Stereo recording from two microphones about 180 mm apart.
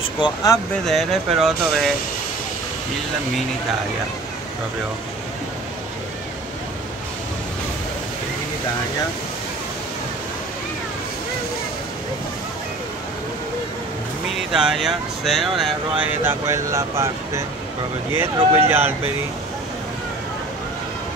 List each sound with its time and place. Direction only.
0.2 s speech: 20° left (ahead or behind)
0.8 s speech: centre (ahead or behind)
14.5 s speech: 5° right (ahead or behind)
16.1 s speech: 15° right (ahead or behind)
18.7 s speech: 10° right (ahead or behind)